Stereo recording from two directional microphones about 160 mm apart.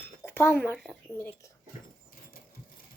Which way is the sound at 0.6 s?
5° left (ahead or behind).